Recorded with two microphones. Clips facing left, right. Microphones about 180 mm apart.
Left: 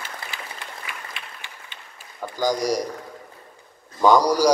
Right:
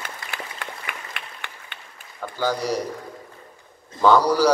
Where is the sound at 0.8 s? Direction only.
60° right (ahead or behind).